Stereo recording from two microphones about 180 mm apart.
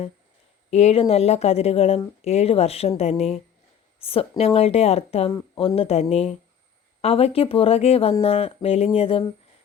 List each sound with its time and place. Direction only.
0.7 s speech: 35° left (ahead or behind)